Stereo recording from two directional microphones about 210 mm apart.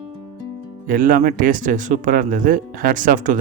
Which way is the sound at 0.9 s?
40° right (ahead or behind).